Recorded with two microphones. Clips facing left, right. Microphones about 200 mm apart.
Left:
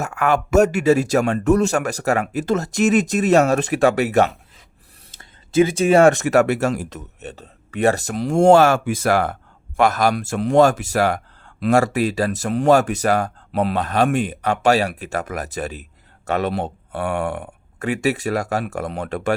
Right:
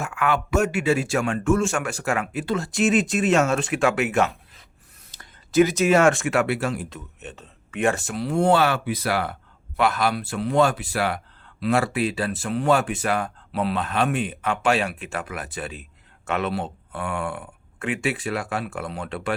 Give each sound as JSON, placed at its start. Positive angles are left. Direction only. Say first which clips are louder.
{"t": 0.0, "sound": "speech", "louder": "left 4 dB", "side_deg": 45}
{"t": 5.1, "sound": "a man's voice", "louder": "left 2 dB", "side_deg": 25}
{"t": 16.6, "sound": "speech", "louder": "left 6 dB", "side_deg": 65}
{"t": 17.1, "sound": "speech", "louder": "left 5 dB", "side_deg": 40}